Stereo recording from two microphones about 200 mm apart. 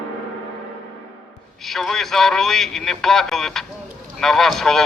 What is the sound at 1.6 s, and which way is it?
A man's voice, centre (ahead or behind).